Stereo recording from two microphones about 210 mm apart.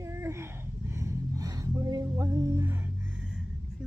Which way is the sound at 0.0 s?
15° right (ahead or behind).